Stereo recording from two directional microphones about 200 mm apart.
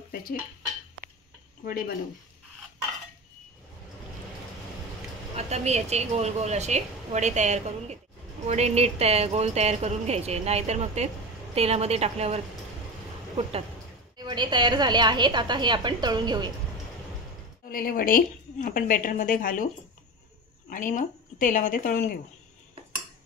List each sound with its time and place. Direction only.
1.7 s a woman's voice: 50° left (ahead or behind)
5.3 s a woman's voice: 35° right (ahead or behind)
14.1 s a woman's voice: 20° right (ahead or behind)
17.6 s a woman's voice: 45° left (ahead or behind)
20.7 s a woman's voice: 40° left (ahead or behind)